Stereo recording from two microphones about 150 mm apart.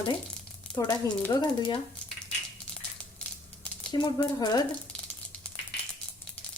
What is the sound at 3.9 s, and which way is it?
Speech, 25° left (ahead or behind).